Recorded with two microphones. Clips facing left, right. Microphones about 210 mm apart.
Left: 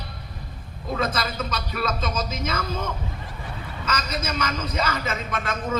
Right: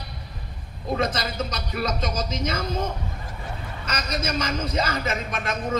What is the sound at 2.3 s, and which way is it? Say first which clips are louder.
Speech: right 1 dB; 30° right (ahead or behind).